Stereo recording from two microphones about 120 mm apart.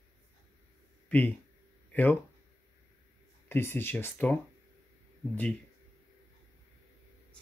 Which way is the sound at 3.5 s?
20° left (ahead or behind).